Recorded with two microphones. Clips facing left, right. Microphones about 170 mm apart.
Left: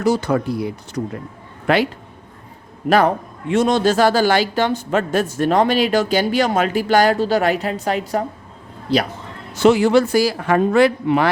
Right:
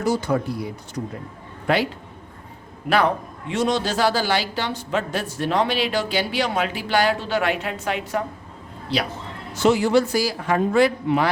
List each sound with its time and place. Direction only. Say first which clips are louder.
0.0 s a man's voice: left 4 dB; 75° left (ahead or behind)
3.5 s speech: left 6 dB; 50° left (ahead or behind)
9.6 s speech: left 4 dB; 70° left (ahead or behind)